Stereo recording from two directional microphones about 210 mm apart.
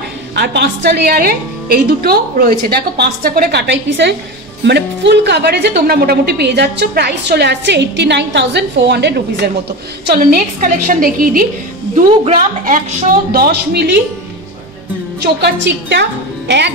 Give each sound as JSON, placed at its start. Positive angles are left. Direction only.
{"t": 0.4, "sound": "a woman's voice", "side_deg": -55}
{"t": 15.1, "sound": "a woman's voice", "side_deg": -55}